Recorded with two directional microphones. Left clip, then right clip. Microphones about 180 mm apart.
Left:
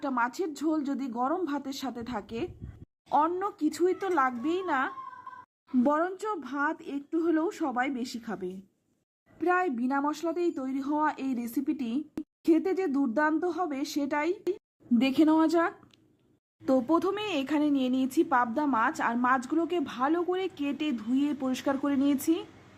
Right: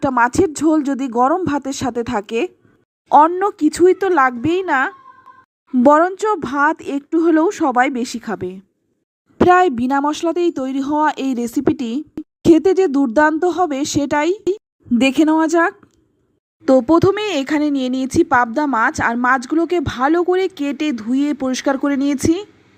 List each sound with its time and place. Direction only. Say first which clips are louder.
0.2 s a woman's voice: right 16 dB; 40° right (ahead or behind)